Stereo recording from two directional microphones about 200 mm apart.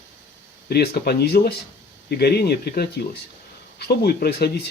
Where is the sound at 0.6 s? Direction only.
50° left (ahead or behind).